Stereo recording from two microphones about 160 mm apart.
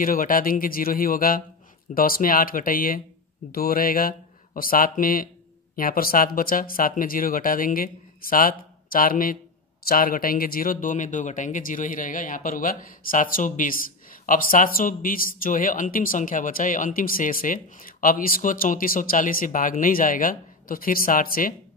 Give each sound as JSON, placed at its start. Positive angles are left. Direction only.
{"t": 0.0, "sound": "speech", "side_deg": 60}